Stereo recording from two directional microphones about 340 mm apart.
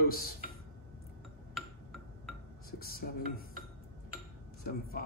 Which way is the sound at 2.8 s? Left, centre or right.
Left.